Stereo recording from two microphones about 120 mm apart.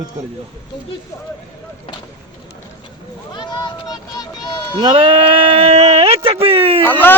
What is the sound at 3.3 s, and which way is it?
Vehicle, 40° left (ahead or behind).